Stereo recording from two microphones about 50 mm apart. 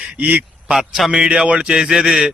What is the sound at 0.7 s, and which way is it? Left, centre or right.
Speech, centre.